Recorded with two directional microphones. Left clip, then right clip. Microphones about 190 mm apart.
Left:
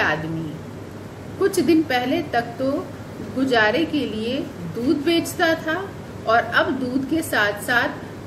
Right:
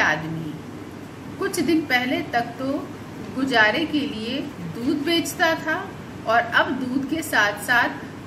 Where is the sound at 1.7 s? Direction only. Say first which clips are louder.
Left 2 dB; 35° left (ahead or behind).